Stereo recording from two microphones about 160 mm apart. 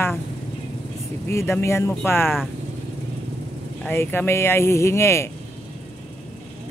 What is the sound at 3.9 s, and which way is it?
Speech, 10° left (ahead or behind).